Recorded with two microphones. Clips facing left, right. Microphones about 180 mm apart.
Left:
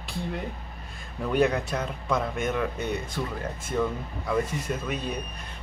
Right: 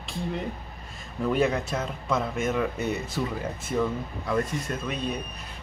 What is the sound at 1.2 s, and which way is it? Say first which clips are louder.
A man's voice: even; centre (ahead or behind).